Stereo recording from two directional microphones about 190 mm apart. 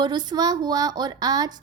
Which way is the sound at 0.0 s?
20° right (ahead or behind).